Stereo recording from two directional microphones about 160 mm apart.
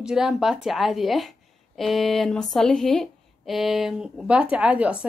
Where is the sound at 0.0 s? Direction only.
5° right (ahead or behind).